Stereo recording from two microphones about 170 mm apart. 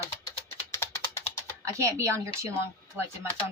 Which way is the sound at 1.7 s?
15° right (ahead or behind).